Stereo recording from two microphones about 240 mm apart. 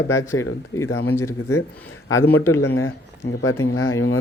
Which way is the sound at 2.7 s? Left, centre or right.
Left.